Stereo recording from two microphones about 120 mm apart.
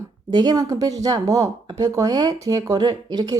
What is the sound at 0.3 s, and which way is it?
Speech, 35° right (ahead or behind).